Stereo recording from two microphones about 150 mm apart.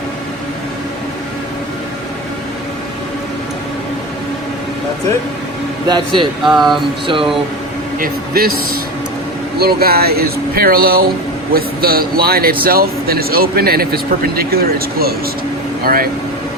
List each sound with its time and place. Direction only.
6.4 s speech: centre (ahead or behind)
7.9 s a man's voice: 75° right (ahead or behind)
15.8 s speech: 75° right (ahead or behind)